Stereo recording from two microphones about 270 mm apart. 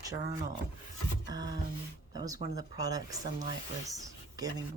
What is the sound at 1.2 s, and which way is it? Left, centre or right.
Speech, centre.